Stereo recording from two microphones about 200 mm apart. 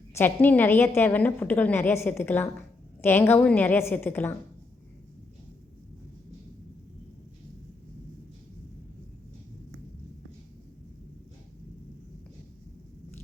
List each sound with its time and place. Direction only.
0.1 s a woman's voice: 10° left (ahead or behind)